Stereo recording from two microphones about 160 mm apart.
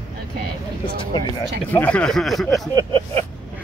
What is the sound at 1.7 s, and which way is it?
Speech, 10° left (ahead or behind).